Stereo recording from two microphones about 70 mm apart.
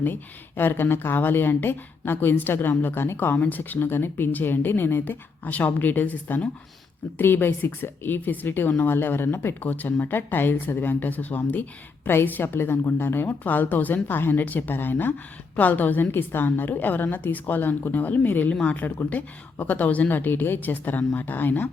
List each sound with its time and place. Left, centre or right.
0.0 s speech: left